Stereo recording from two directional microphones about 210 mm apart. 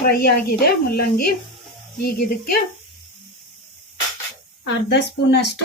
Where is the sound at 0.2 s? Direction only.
50° left (ahead or behind).